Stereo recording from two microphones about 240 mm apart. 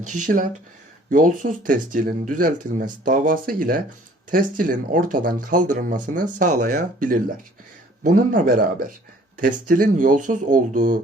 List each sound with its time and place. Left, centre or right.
0.0 s speech: right
1.1 s speech: right